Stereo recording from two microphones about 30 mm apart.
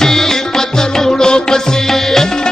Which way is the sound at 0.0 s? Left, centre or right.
Centre.